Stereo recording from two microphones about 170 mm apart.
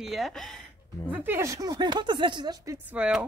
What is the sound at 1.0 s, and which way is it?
Speech, 10° right (ahead or behind).